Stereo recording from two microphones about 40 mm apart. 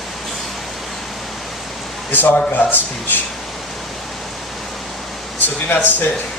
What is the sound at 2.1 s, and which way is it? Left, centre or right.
Speech, left.